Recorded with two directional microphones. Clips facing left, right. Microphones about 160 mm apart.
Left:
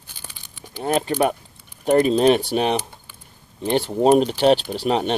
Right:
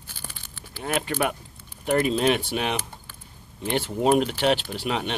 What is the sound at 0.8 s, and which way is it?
Speech, 35° left (ahead or behind).